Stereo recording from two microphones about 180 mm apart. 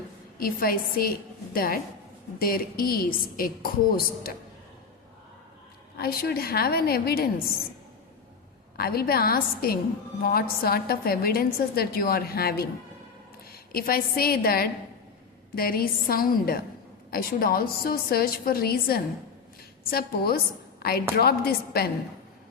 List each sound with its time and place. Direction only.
0.3 s a woman's voice: 55° left (ahead or behind)
6.0 s a woman's voice: 60° left (ahead or behind)
8.8 s a woman's voice: 60° left (ahead or behind)